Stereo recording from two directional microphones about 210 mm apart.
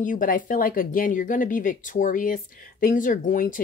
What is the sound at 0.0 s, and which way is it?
Speech, 40° left (ahead or behind).